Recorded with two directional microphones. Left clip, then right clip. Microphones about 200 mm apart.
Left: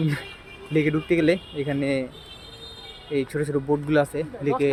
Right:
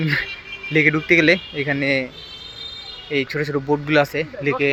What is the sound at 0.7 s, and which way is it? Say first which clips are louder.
Speech: right 7 dB; 5° left (ahead or behind).